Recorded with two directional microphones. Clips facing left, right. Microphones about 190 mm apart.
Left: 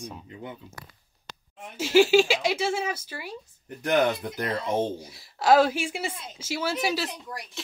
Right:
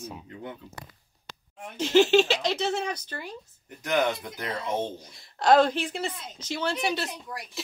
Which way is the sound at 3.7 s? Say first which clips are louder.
Left 3 dB; 55° left (ahead or behind).